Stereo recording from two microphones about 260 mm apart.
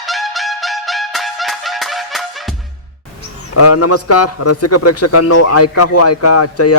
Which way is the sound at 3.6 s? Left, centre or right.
Left.